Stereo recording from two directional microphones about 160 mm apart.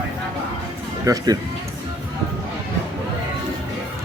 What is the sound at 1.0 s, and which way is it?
Speech, 20° right (ahead or behind).